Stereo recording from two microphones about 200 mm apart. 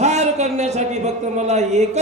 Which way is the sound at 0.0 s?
35° right (ahead or behind).